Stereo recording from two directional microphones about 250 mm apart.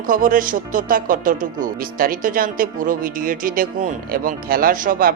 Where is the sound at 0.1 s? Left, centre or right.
Right.